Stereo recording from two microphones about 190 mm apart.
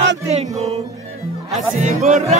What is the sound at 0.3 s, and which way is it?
Music, 35° right (ahead or behind).